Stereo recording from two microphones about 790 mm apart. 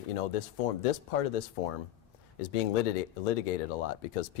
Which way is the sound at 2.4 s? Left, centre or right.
Left.